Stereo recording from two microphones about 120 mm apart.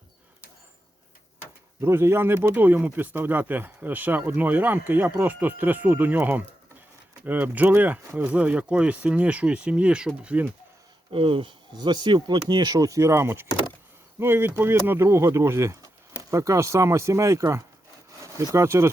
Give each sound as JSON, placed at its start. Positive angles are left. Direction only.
{"t": 1.8, "sound": "speech", "side_deg": -20}
{"t": 11.1, "sound": "speech", "side_deg": -45}